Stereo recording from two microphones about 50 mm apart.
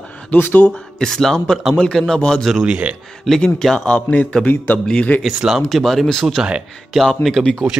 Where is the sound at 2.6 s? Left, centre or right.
Right.